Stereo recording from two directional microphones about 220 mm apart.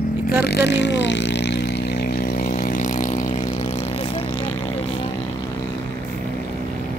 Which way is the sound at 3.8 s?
25° left (ahead or behind).